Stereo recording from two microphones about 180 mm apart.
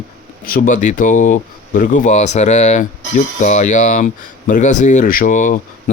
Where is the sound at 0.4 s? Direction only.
50° left (ahead or behind).